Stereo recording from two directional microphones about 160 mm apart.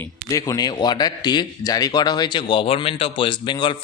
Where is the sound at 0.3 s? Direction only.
20° left (ahead or behind).